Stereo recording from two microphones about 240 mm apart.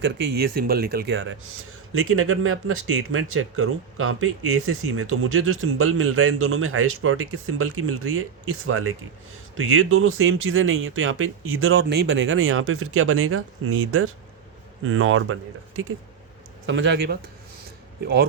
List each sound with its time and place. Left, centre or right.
0.0 s speech: right
16.6 s speech: right